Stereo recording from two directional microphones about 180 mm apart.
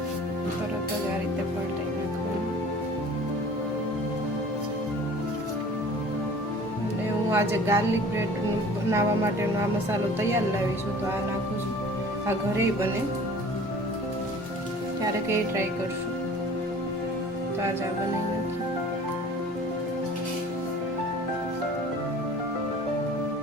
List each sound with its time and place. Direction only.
7.3 s speech: 15° right (ahead or behind)
8.9 s speech: 15° right (ahead or behind)